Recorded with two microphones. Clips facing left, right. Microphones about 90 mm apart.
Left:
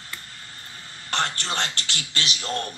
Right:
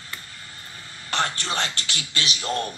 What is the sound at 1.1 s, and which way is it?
A man's voice, 15° right (ahead or behind).